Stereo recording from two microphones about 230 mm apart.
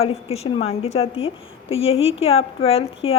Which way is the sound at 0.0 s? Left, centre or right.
Left.